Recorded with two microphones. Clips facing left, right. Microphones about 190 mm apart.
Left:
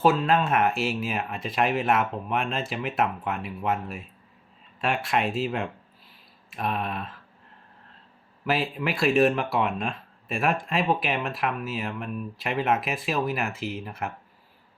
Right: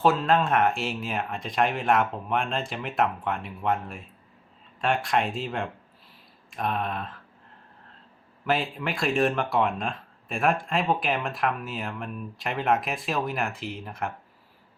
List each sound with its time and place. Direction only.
0.0 s speech: 5° left (ahead or behind)
8.4 s speech: 5° left (ahead or behind)